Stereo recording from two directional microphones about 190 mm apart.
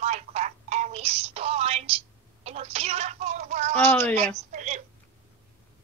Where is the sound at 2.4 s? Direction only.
35° right (ahead or behind).